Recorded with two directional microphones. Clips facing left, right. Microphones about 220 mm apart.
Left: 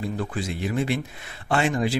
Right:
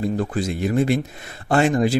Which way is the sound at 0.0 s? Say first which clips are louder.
Right 6 dB; 40° right (ahead or behind).